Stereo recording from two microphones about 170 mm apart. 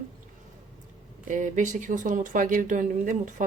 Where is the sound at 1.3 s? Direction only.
50° right (ahead or behind).